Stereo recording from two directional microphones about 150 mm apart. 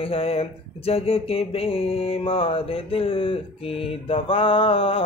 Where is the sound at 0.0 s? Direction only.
40° left (ahead or behind).